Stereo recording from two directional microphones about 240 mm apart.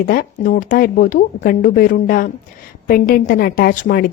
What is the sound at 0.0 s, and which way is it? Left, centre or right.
A woman's voice, left.